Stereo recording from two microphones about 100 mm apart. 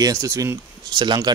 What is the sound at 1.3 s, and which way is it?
Speech, 45° right (ahead or behind).